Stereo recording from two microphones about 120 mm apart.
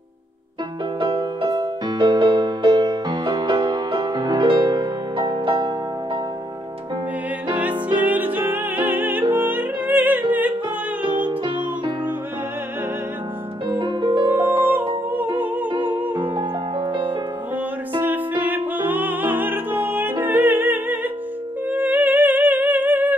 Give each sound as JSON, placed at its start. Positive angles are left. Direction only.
{"t": 0.9, "sound": "music", "side_deg": -40}
{"t": 7.5, "sound": "music", "side_deg": -15}
{"t": 11.4, "sound": "music", "side_deg": -40}
{"t": 13.7, "sound": "music", "side_deg": -40}
{"t": 14.4, "sound": "music", "side_deg": -20}
{"t": 15.3, "sound": "humming", "side_deg": -15}
{"t": 15.7, "sound": "music", "side_deg": -40}
{"t": 17.9, "sound": "music", "side_deg": -15}